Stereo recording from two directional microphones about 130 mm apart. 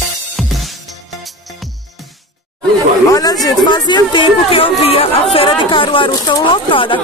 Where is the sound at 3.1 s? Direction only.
30° left (ahead or behind).